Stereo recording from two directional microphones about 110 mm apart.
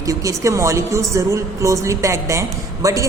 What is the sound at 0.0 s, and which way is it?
A woman's voice, 30° right (ahead or behind).